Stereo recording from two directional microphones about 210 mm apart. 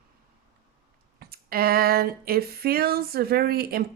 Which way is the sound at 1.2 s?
45° right (ahead or behind).